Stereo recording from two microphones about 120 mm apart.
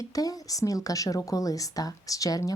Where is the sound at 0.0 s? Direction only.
30° left (ahead or behind).